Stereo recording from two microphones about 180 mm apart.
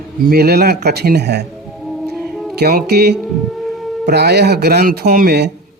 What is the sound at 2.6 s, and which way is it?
Speech, 60° right (ahead or behind).